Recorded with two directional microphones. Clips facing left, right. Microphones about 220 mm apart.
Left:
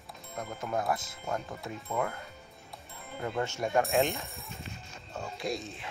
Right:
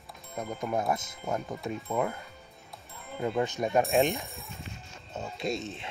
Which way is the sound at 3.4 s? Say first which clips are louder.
Right 2 dB; 20° right (ahead or behind).